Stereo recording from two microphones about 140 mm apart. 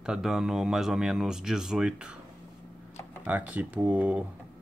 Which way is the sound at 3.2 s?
10° right (ahead or behind).